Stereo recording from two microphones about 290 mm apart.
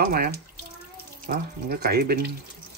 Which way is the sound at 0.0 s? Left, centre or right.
Right.